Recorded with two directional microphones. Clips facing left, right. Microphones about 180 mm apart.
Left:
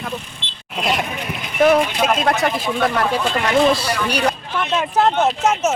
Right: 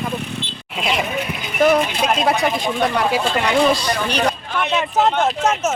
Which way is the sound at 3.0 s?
5° right (ahead or behind).